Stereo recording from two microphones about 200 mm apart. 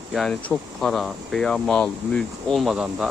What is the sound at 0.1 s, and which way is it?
Speech, centre (ahead or behind).